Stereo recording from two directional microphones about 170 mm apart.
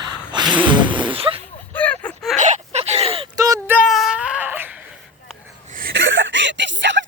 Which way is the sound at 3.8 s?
Centre (ahead or behind).